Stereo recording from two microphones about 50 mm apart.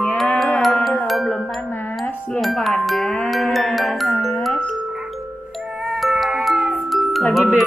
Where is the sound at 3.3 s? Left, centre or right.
Centre.